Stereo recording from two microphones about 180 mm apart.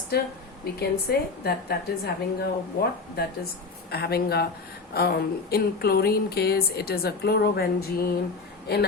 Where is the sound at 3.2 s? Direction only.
65° left (ahead or behind).